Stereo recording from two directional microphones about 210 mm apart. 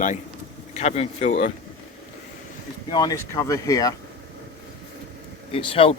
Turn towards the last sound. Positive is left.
turn(degrees=25)  # may be behind; listen again after turning